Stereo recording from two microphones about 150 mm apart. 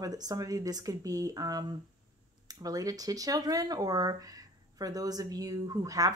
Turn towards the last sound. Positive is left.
turn(degrees=-25)  # may be behind; listen again after turning